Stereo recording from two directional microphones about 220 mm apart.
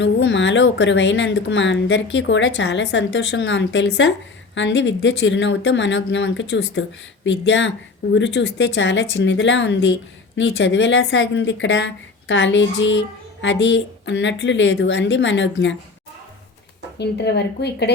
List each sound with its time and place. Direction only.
0.0 s speech: 55° left (ahead or behind)
17.0 s a woman's voice: 50° left (ahead or behind)